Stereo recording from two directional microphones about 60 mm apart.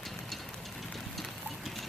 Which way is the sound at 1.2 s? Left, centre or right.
Centre.